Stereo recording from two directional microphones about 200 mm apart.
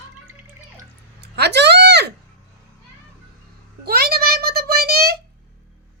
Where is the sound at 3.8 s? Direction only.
50° right (ahead or behind).